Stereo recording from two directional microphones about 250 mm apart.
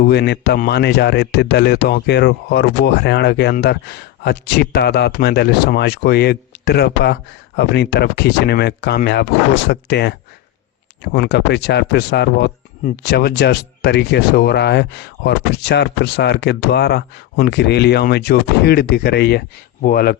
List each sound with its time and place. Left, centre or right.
0.0 s speech: left